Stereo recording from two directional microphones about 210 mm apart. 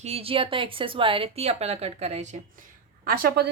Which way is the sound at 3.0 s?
45° right (ahead or behind).